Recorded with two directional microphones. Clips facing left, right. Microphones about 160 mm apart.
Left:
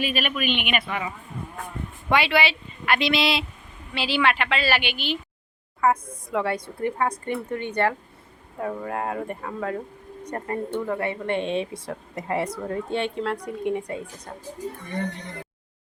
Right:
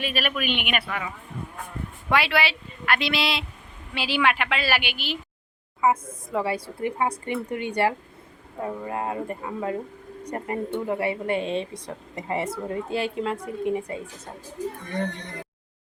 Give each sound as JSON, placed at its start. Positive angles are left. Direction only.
{"t": 0.0, "sound": "speech", "side_deg": 0}
{"t": 3.9, "sound": "a woman's voice", "side_deg": -10}